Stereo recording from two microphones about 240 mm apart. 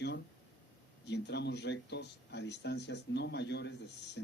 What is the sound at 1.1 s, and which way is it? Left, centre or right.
Speech, left.